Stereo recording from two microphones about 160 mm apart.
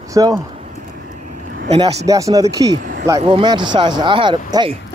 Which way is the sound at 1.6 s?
35° right (ahead or behind).